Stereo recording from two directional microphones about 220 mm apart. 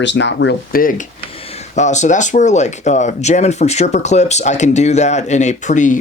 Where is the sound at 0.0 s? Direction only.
55° left (ahead or behind).